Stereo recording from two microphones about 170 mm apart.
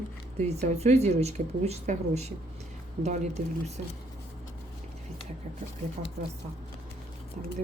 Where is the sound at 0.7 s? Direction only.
40° right (ahead or behind).